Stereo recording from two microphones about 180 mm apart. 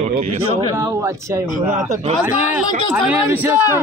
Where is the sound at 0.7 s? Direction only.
15° right (ahead or behind).